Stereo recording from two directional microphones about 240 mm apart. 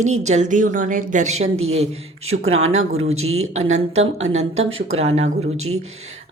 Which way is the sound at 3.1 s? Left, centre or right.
Right.